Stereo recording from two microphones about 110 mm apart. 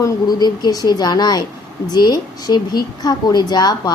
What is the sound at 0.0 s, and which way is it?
Speech, 40° left (ahead or behind).